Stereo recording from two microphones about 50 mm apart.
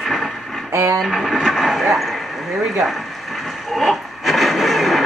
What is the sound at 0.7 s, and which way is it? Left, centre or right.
Speech, right.